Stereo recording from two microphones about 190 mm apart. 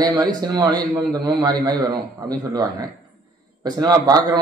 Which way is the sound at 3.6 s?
20° right (ahead or behind).